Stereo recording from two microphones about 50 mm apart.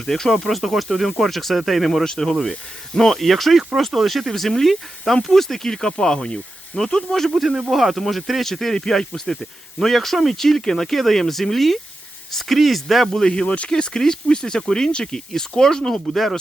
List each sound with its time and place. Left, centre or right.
0.0 s speech: centre
7.3 s speech: centre
13.2 s speech: centre